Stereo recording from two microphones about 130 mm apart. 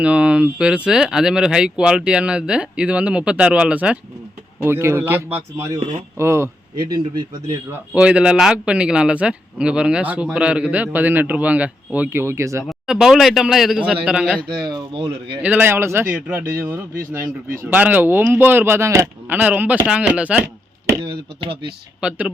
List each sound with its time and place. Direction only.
0.0 s a man's voice: 10° right (ahead or behind)
4.6 s a man's voice: 20° right (ahead or behind)
6.8 s speech: 35° right (ahead or behind)
7.9 s a man's voice: 10° right (ahead or behind)
12.6 s speech: 5° right (ahead or behind)
14.6 s speech: 35° right (ahead or behind)
15.4 s a man's voice: 10° right (ahead or behind)
21.0 s speech: 40° right (ahead or behind)
22.0 s a man's voice: 10° right (ahead or behind)